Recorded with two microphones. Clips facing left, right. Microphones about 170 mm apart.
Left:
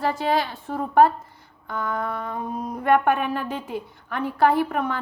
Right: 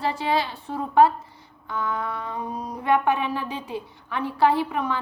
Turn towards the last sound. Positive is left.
turn(degrees=50)  # may be behind; listen again after turning